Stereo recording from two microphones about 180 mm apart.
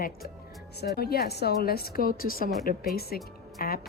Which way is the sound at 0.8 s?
60° left (ahead or behind).